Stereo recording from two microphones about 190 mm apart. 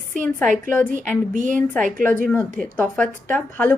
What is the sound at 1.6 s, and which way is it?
Speech, 5° left (ahead or behind).